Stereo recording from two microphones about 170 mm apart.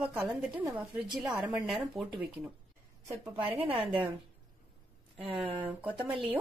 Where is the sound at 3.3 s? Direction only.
35° right (ahead or behind).